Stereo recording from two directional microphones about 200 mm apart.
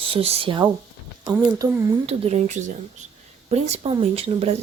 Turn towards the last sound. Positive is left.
turn(degrees=-30)  # may be behind; listen again after turning